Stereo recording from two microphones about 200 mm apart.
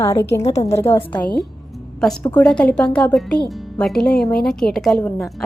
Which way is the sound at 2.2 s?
5° left (ahead or behind).